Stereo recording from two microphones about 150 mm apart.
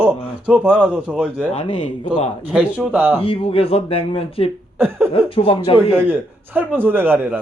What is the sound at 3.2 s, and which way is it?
Speech, 40° left (ahead or behind).